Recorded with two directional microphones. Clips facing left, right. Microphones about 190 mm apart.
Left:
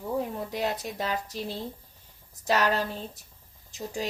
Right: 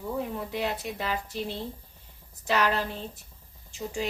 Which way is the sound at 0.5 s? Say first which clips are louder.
Left 1 dB; 40° left (ahead or behind).